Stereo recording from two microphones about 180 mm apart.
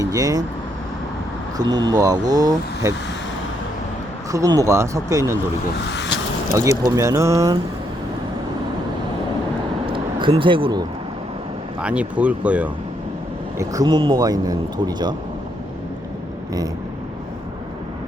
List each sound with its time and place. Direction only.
0.0 s speech: 20° right (ahead or behind)
1.5 s speech: 25° right (ahead or behind)
4.3 s speech: 20° right (ahead or behind)
6.6 s speech: 15° right (ahead or behind)
9.8 s a sound: 30° right (ahead or behind)
11.8 s speech: 5° right (ahead or behind)
13.6 s speech: 20° right (ahead or behind)